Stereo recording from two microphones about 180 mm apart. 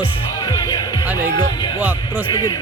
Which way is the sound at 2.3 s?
25° left (ahead or behind).